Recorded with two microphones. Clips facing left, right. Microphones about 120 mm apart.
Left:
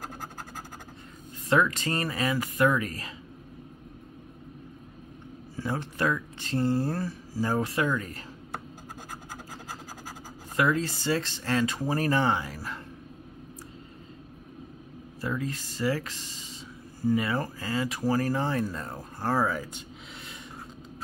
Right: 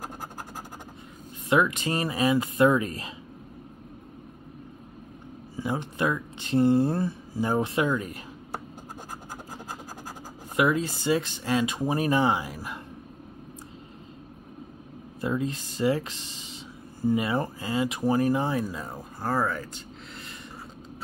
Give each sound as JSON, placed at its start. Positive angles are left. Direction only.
{"t": 1.5, "sound": "speech", "side_deg": -15}
{"t": 5.6, "sound": "speech", "side_deg": -15}
{"t": 10.5, "sound": "speech", "side_deg": -15}
{"t": 15.1, "sound": "speech", "side_deg": -20}